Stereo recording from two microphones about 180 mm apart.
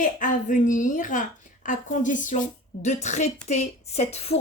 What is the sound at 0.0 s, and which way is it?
A woman's voice, 45° left (ahead or behind).